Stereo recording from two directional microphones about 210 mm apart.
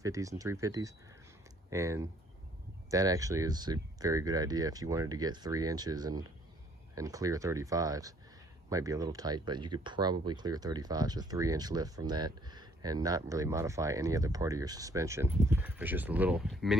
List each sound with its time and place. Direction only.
0.0 s speech: 15° right (ahead or behind)